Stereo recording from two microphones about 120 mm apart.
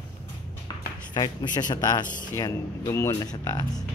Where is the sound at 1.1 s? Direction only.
35° left (ahead or behind).